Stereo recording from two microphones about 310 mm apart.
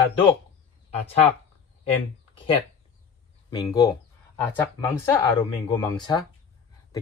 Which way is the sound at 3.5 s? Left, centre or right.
Centre.